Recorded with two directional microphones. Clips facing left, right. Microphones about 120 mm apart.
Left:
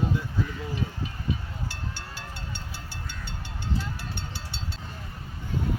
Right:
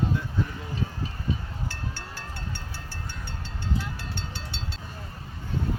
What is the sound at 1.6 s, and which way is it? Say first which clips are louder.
Music: right 1 dB; 15° left (ahead or behind).